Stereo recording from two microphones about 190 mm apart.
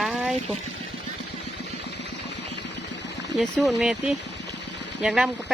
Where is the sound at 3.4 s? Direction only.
Centre (ahead or behind).